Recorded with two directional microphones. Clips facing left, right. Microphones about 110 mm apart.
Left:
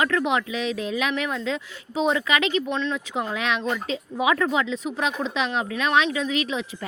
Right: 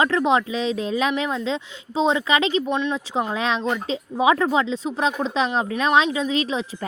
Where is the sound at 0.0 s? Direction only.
30° right (ahead or behind).